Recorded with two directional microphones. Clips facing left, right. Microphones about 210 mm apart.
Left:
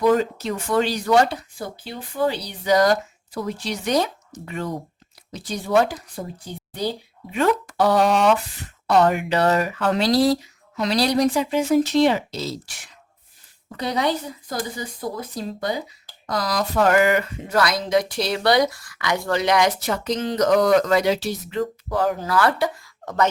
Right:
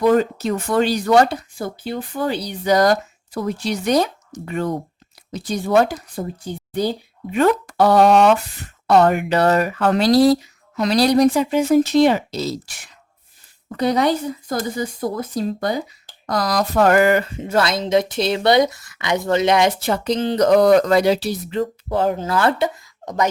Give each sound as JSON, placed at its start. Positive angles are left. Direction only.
{"t": 0.0, "sound": "speech", "side_deg": -55}
{"t": 7.3, "sound": "speech", "side_deg": -55}
{"t": 13.7, "sound": "speech", "side_deg": -50}
{"t": 16.2, "sound": "speech", "side_deg": -45}
{"t": 17.2, "sound": "speech", "side_deg": -25}